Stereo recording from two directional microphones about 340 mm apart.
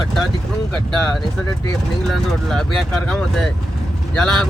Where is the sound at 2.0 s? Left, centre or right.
Centre.